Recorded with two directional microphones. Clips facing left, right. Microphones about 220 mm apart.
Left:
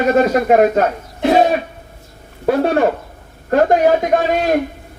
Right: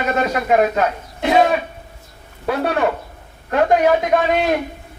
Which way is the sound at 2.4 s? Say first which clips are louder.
Left 5 dB; 45° left (ahead or behind).